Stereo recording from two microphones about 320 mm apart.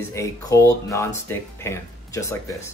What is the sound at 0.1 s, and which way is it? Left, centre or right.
Speech, centre.